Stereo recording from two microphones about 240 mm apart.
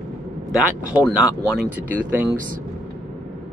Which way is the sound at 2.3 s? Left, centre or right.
Right.